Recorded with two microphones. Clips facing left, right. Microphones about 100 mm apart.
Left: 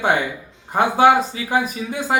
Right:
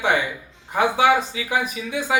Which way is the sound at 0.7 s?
45° left (ahead or behind).